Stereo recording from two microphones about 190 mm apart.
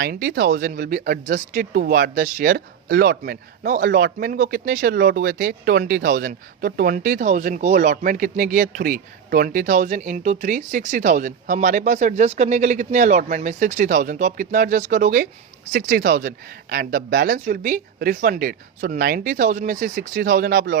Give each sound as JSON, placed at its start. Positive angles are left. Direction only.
{"t": 0.0, "sound": "speech", "side_deg": -60}